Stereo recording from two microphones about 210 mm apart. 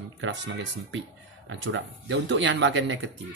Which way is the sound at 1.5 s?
60° right (ahead or behind).